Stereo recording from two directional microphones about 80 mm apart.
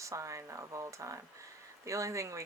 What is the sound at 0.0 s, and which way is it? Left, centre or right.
Speech, right.